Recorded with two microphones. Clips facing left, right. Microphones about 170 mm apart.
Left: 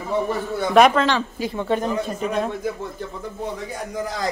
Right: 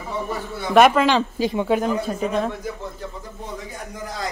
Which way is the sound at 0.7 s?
5° right (ahead or behind).